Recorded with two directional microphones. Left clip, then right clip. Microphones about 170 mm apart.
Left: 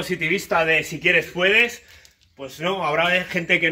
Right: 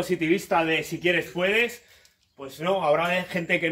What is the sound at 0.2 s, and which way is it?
Speech, 25° right (ahead or behind).